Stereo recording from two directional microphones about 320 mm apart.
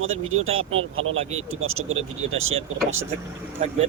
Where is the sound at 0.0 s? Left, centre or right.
Right.